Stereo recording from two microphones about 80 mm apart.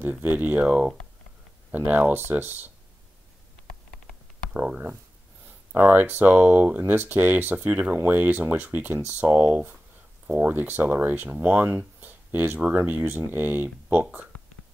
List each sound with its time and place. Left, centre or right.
0.0 s speech: right
1.9 s speech: right
4.6 s speech: centre